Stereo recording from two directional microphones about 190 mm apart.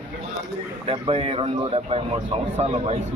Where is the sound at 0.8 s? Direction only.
30° right (ahead or behind).